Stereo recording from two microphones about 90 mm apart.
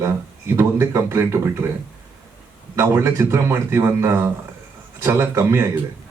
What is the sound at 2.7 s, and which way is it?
Speech, 30° right (ahead or behind).